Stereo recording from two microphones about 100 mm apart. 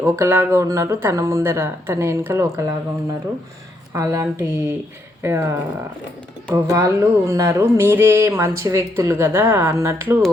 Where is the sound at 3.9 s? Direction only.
30° right (ahead or behind).